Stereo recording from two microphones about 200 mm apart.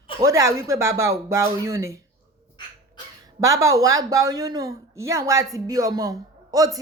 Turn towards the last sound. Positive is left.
turn(degrees=-15)  # may be behind; listen again after turning